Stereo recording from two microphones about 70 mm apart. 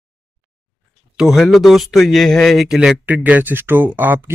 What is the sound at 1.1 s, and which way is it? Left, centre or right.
Speech, centre.